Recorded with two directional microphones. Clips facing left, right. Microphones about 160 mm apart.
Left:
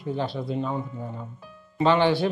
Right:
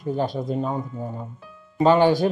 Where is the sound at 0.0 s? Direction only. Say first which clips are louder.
Right 4 dB; 45° right (ahead or behind).